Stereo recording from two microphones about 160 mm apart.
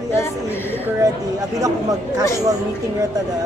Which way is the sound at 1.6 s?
20° right (ahead or behind).